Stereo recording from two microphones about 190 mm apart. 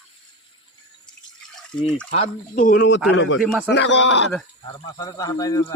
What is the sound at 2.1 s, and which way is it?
Speech, 40° left (ahead or behind).